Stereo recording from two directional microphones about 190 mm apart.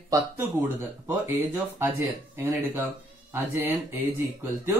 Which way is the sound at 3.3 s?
10° right (ahead or behind).